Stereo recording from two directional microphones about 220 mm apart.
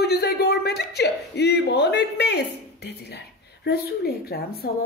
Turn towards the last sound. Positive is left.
turn(degrees=45)  # may be behind; listen again after turning